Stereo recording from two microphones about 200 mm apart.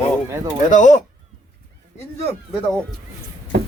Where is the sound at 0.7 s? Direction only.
40° left (ahead or behind).